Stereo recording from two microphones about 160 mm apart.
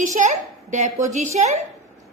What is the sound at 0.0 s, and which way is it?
A child's voice, 50° right (ahead or behind).